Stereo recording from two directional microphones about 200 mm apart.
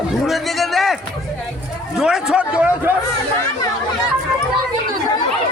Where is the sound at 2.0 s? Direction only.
5° right (ahead or behind).